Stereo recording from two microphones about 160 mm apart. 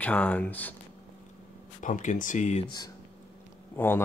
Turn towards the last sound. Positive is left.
turn(degrees=15)  # may be behind; listen again after turning